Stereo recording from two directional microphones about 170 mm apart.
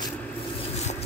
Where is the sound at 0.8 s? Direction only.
40° left (ahead or behind).